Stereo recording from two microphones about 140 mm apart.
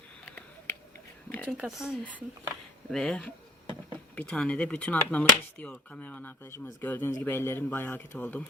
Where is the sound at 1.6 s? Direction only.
5° right (ahead or behind); by 8.4 s 15° left (ahead or behind).